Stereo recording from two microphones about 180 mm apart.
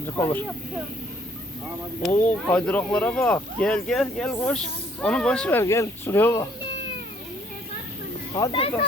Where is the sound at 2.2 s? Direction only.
10° left (ahead or behind).